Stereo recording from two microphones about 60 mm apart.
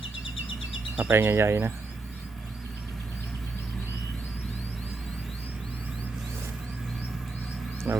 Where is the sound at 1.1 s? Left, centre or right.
Right.